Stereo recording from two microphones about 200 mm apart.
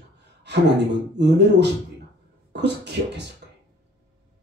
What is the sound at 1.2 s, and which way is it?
Speech, 60° right (ahead or behind).